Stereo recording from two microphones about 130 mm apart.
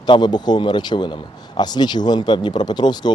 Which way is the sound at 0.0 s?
35° left (ahead or behind).